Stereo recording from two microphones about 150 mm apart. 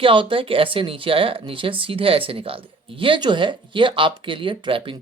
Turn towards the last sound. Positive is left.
turn(degrees=-35)  # may be behind; listen again after turning